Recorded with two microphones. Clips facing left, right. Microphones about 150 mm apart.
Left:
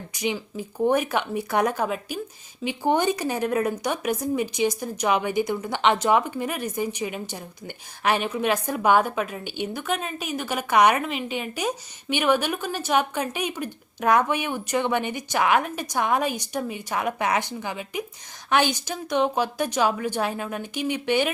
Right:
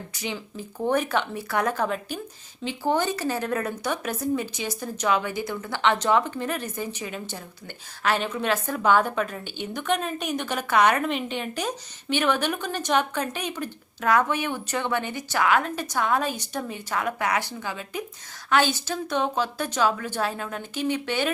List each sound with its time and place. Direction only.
0.1 s speech: 15° left (ahead or behind)